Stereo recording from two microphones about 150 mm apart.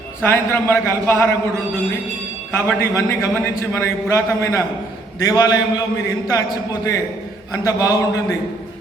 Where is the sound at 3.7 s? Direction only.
20° left (ahead or behind).